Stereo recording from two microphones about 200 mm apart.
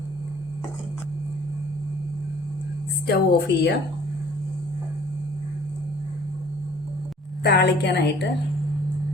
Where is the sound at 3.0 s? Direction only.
55° left (ahead or behind).